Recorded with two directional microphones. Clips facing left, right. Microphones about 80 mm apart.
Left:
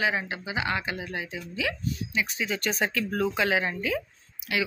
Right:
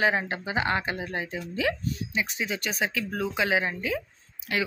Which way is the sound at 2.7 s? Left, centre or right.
Centre.